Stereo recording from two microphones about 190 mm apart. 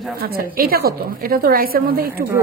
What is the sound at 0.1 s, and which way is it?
A woman's voice, 50° right (ahead or behind).